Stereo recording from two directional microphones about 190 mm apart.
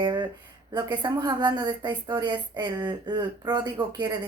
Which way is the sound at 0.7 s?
25° right (ahead or behind).